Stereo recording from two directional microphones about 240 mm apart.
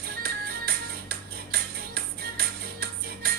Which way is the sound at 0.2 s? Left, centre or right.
Right.